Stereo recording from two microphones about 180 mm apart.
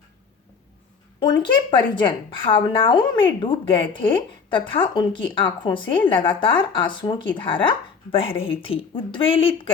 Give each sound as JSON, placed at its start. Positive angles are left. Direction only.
{"t": 1.2, "sound": "speech", "side_deg": 25}